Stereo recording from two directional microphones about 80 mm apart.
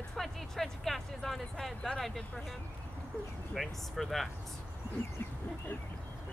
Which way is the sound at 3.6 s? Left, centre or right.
Centre.